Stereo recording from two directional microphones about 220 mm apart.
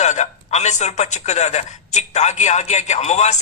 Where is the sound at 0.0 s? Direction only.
30° left (ahead or behind).